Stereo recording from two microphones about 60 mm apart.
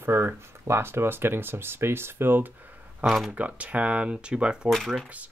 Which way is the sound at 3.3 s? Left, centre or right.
Right.